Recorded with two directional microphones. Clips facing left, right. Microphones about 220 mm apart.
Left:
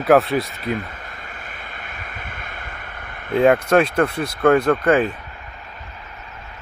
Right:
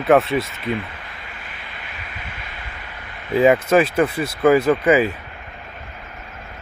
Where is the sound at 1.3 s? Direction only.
50° left (ahead or behind).